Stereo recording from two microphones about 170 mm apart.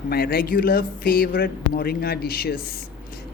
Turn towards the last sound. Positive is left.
turn(degrees=65)  # may be behind; listen again after turning